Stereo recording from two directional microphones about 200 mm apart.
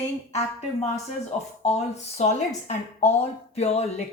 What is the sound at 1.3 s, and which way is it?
Speech, 35° left (ahead or behind).